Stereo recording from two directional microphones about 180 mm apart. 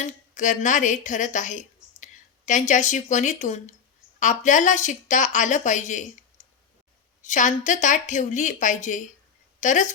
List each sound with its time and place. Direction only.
0.0 s a woman's voice: 45° left (ahead or behind)
7.3 s a woman's voice: 45° left (ahead or behind)